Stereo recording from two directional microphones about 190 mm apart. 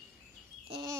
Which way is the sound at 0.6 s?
20° right (ahead or behind).